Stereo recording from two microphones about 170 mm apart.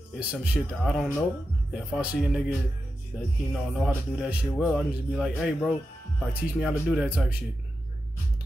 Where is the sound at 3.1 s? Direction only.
Centre (ahead or behind).